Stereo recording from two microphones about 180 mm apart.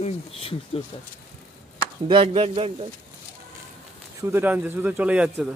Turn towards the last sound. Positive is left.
turn(degrees=-5)  # may be behind; listen again after turning